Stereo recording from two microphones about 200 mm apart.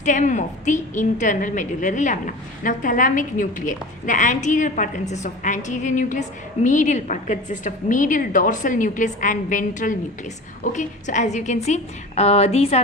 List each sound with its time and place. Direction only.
0.0 s a woman's voice: 40° left (ahead or behind)